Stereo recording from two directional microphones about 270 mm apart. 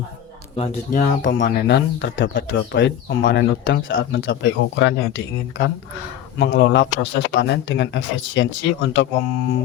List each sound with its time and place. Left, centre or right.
0.5 s speech: left
1.2 s speech: left